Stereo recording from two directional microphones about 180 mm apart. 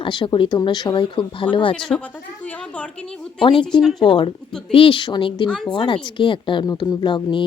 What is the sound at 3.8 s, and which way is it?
Speech, centre (ahead or behind).